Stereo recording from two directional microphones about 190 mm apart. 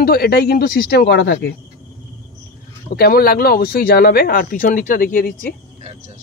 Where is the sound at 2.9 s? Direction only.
55° left (ahead or behind).